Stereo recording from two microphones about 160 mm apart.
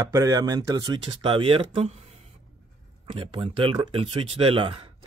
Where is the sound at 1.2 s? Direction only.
35° right (ahead or behind).